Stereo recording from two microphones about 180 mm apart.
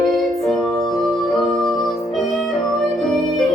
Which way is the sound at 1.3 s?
20° left (ahead or behind).